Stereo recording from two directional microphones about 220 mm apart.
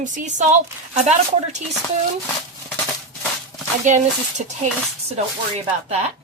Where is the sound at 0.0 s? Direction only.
35° right (ahead or behind).